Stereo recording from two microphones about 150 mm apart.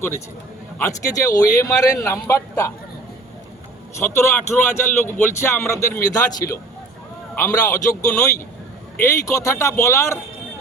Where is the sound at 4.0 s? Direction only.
15° left (ahead or behind).